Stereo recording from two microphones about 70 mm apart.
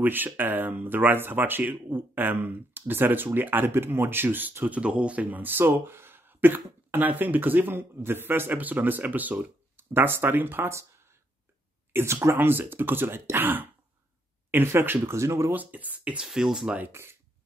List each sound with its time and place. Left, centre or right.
0.0 s speech: right
11.9 s speech: right
15.5 s speech: right
16.3 s speech: centre
16.9 s speech: right